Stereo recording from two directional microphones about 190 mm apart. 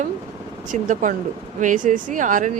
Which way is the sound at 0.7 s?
40° right (ahead or behind).